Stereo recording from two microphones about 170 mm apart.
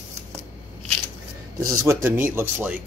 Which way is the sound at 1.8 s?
15° right (ahead or behind).